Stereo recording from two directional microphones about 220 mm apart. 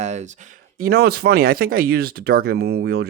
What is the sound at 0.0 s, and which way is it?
Speech, 30° right (ahead or behind).